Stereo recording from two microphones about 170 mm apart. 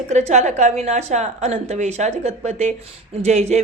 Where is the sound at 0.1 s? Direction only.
40° right (ahead or behind).